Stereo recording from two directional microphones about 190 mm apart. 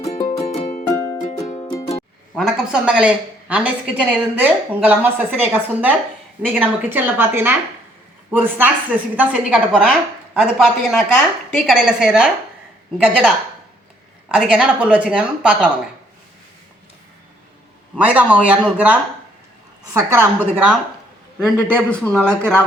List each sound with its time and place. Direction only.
0.3 s music: 35° left (ahead or behind)
0.9 s music: 15° left (ahead or behind)
2.3 s a woman's voice: 5° right (ahead or behind)
17.9 s a woman's voice: 5° right (ahead or behind)
21.3 s a man's voice: 5° left (ahead or behind)